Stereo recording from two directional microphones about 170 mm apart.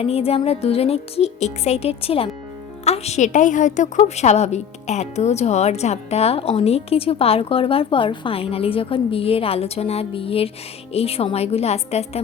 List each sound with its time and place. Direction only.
0.0 s a woman's voice: 35° left (ahead or behind)